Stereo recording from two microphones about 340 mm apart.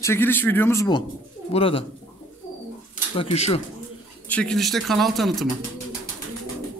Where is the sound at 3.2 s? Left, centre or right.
Centre.